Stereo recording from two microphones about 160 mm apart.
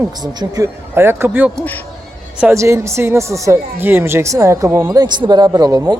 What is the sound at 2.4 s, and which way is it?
Speech, 15° right (ahead or behind).